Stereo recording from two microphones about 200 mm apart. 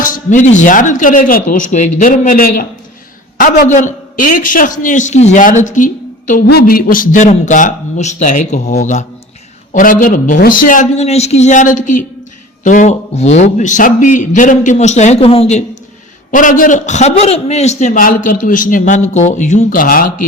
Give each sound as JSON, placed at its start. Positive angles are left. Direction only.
{"t": 0.0, "sound": "a man's voice", "side_deg": 40}